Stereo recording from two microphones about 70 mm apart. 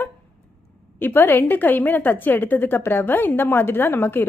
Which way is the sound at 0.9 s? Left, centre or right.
Left.